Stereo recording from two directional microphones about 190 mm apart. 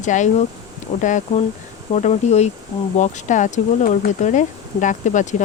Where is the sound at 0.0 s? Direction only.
40° left (ahead or behind).